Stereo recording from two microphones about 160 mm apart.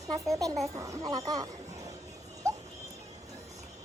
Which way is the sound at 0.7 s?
20° right (ahead or behind).